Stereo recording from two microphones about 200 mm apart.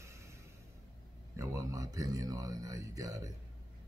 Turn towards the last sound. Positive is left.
turn(degrees=-15)  # may be behind; listen again after turning